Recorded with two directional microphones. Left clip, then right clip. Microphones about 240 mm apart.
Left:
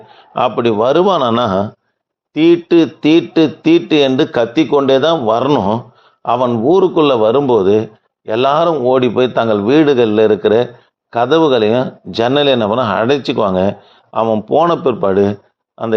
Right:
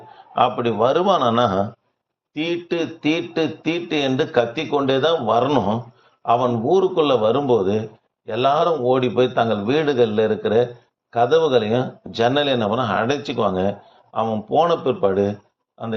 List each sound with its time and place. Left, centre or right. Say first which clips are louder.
0.1 s a man's voice: left 3 dB; left